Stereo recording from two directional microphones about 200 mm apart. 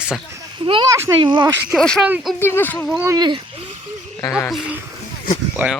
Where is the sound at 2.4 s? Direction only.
10° left (ahead or behind).